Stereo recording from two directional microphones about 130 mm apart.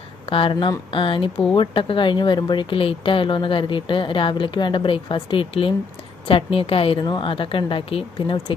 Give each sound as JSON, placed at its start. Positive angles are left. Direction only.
{"t": 0.3, "sound": "a woman's voice", "side_deg": 45}